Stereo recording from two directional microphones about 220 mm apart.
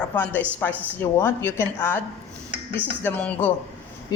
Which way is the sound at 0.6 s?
10° left (ahead or behind).